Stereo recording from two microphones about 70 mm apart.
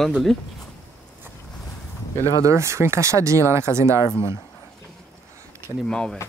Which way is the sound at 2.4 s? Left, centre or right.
Right.